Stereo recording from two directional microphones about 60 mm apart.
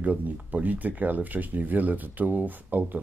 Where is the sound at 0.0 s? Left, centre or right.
Right.